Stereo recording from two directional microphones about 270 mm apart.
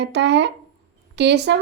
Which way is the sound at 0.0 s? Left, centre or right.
Right.